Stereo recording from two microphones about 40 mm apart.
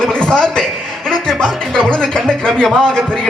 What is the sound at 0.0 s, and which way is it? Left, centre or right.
Chuckle, centre.